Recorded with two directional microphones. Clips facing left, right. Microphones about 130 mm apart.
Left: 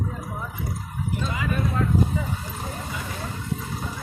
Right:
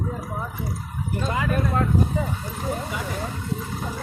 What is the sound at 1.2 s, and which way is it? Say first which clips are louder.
Speech: right 5 dB; 45° right (ahead or behind).